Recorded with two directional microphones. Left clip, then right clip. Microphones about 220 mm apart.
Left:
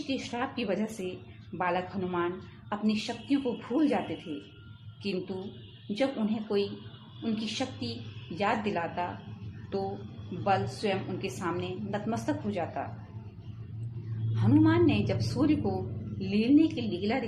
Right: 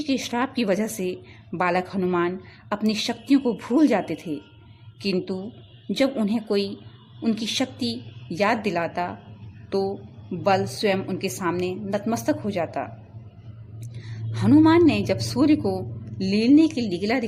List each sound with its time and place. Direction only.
0.1 s a woman's voice: 45° right (ahead or behind)
6.0 s a woman's voice: 45° right (ahead or behind)
14.3 s a woman's voice: 50° right (ahead or behind)